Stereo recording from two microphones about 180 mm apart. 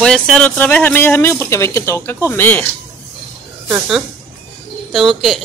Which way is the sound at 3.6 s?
10° right (ahead or behind).